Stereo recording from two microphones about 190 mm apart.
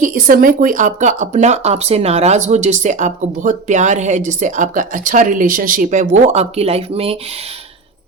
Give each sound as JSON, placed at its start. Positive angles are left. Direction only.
{"t": 0.0, "sound": "speech", "side_deg": -45}